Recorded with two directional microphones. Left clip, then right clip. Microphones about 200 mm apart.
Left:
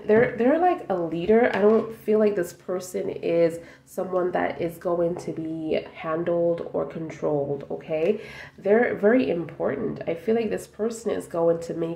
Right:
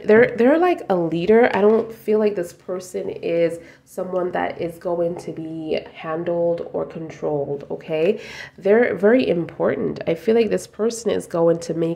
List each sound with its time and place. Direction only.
0.0 s speech: 40° right (ahead or behind)
2.1 s speech: 10° right (ahead or behind)
7.9 s speech: 25° right (ahead or behind)